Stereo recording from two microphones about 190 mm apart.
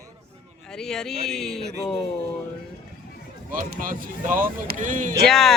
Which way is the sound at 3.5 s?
45° right (ahead or behind).